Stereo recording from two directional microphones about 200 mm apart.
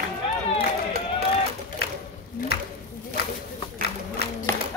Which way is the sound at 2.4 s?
40° left (ahead or behind).